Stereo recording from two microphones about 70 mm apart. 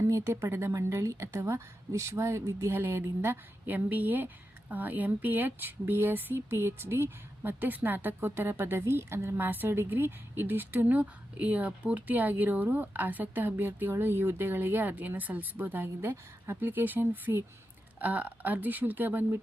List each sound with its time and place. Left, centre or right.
0.1 s a woman's voice: right